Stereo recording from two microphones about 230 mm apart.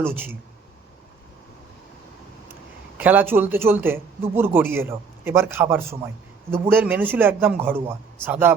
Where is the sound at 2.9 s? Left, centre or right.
Centre.